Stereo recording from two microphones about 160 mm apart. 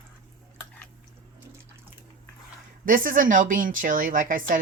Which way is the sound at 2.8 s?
60° right (ahead or behind).